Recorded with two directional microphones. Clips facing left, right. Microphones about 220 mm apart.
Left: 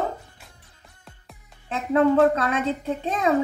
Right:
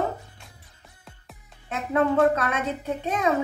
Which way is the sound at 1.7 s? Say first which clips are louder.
Left 4 dB; 30° left (ahead or behind).